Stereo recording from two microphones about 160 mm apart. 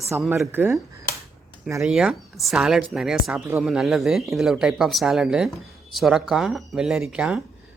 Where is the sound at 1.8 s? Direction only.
5° right (ahead or behind).